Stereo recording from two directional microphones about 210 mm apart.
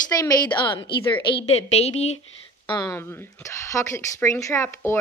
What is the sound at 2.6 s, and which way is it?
Speech, 20° left (ahead or behind).